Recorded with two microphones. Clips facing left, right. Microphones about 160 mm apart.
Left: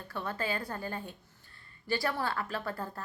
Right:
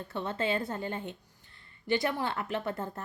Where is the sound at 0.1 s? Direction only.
25° right (ahead or behind).